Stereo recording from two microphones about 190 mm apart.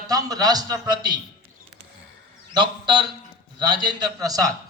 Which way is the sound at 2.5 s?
25° right (ahead or behind).